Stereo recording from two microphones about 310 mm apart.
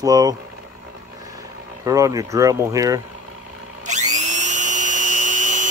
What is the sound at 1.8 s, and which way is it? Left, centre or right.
Speech, centre.